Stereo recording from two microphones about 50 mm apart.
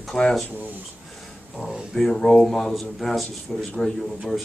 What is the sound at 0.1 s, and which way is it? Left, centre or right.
Speech, centre.